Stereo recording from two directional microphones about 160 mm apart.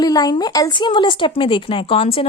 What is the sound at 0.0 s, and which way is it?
Speech, 25° left (ahead or behind).